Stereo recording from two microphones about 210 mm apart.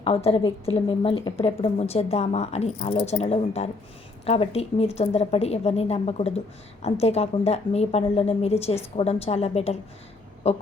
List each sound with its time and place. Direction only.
0.0 s a woman's voice: 25° left (ahead or behind)